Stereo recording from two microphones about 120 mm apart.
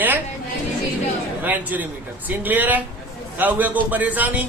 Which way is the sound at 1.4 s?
15° right (ahead or behind).